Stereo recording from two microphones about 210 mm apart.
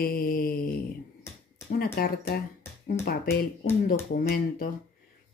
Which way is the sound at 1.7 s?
45° left (ahead or behind).